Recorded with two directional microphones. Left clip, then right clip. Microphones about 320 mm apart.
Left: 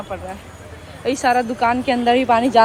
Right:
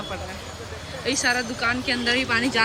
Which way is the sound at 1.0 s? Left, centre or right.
Centre.